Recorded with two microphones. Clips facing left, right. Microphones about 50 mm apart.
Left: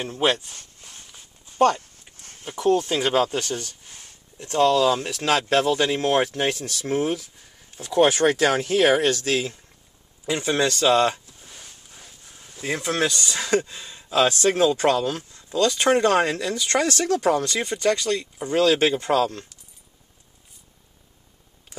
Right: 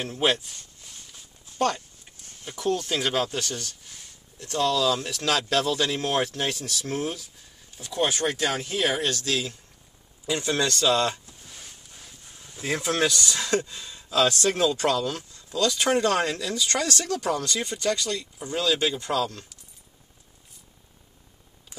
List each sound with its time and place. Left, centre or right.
0.0 s speech: centre
0.5 s a sound: left
1.1 s a sound: centre
2.4 s speech: centre
6.5 s speech: centre
6.9 s speech: left
8.1 s speech: left
8.9 s speech: left
11.5 s a sound: centre
12.6 s speech: centre
13.1 s speech: left